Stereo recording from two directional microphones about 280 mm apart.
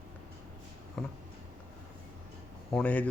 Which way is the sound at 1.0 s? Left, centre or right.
Centre.